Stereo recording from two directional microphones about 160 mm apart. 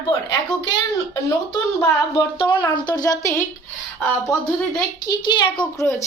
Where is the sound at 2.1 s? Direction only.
30° left (ahead or behind).